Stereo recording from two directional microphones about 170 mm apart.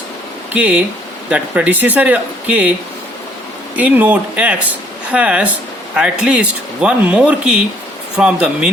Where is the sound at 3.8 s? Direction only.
10° right (ahead or behind).